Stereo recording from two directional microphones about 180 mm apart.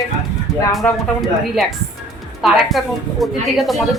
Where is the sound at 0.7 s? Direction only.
Centre (ahead or behind).